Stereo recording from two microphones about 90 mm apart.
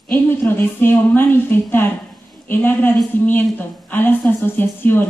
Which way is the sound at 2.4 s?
20° left (ahead or behind).